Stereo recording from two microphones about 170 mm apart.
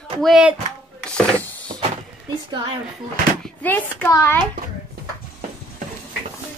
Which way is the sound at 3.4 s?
10° left (ahead or behind).